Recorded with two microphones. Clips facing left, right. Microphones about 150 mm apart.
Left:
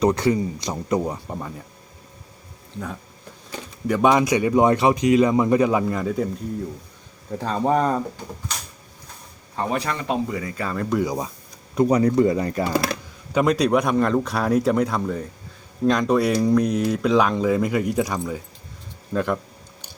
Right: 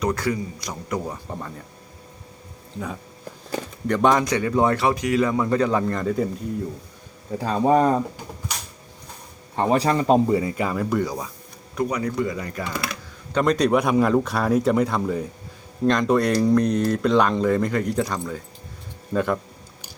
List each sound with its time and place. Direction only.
0.0 s speech: 25° left (ahead or behind)
3.8 s speech: 5° left (ahead or behind)
7.3 s speech: 5° right (ahead or behind)
9.6 s speech: 35° right (ahead or behind)
10.6 s speech: 10° right (ahead or behind)
11.0 s speech: 15° left (ahead or behind)
11.7 s speech: 30° left (ahead or behind)
13.3 s speech: 5° left (ahead or behind)